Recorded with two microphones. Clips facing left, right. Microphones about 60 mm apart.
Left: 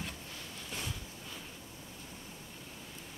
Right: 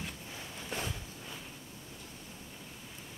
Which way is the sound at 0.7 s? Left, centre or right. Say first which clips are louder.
Right 4 dB; right.